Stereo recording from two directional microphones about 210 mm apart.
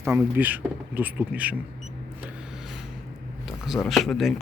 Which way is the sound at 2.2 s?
Centre (ahead or behind).